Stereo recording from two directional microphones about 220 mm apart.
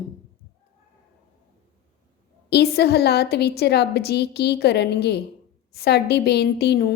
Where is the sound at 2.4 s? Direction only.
50° left (ahead or behind).